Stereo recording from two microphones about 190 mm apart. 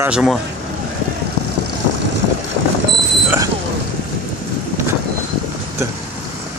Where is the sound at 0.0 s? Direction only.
5° right (ahead or behind).